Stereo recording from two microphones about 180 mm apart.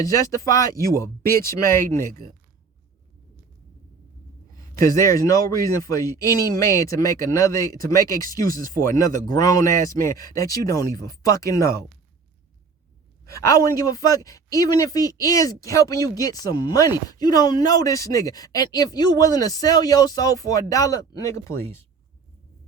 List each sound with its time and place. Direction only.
0.4 s speech: 20° left (ahead or behind)
4.9 s speech: 15° left (ahead or behind)
13.3 s speech: 15° left (ahead or behind)